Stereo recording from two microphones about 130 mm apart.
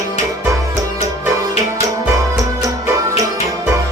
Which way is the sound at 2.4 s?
25° right (ahead or behind).